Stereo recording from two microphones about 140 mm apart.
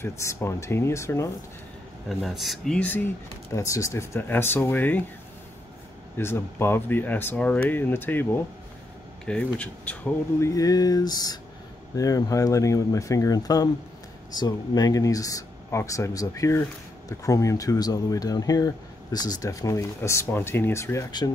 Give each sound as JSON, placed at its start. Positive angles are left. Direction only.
{"t": 0.0, "sound": "speech", "side_deg": 20}
{"t": 2.0, "sound": "speech", "side_deg": 0}
{"t": 3.5, "sound": "speech", "side_deg": 20}
{"t": 6.1, "sound": "speech", "side_deg": 15}
{"t": 10.4, "sound": "speech", "side_deg": 25}